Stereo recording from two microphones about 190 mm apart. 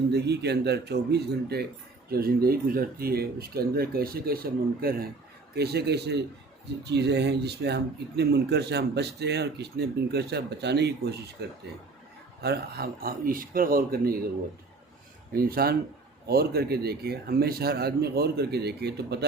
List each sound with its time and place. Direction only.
0.1 s speech: 60° right (ahead or behind)
15.3 s speech: 50° right (ahead or behind)